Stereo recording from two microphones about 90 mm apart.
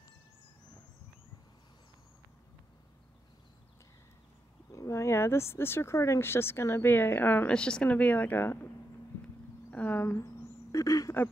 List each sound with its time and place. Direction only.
4.7 s speech: 35° left (ahead or behind)
9.7 s a sound: 20° left (ahead or behind)
10.7 s speech: 35° left (ahead or behind)